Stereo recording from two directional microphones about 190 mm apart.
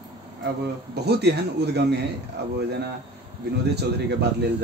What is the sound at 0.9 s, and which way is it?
A man's voice, 60° right (ahead or behind).